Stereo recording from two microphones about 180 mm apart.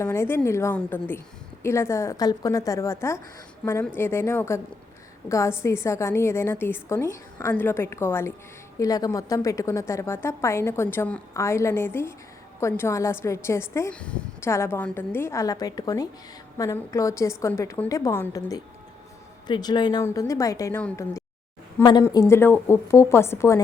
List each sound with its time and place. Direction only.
0.0 s a woman's voice: 15° left (ahead or behind)